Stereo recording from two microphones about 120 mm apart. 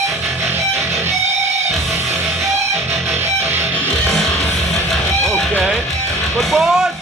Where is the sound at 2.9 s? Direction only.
20° right (ahead or behind).